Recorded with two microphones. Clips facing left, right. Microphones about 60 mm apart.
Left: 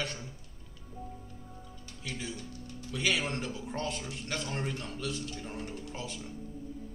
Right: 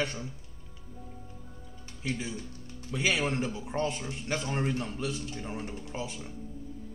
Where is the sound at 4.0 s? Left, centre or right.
Centre.